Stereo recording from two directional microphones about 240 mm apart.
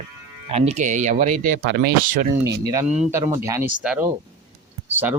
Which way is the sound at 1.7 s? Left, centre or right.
Right.